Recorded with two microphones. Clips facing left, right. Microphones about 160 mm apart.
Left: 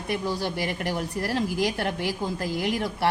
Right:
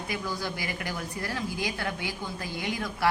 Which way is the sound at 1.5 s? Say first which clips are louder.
Left 6 dB; 85° left.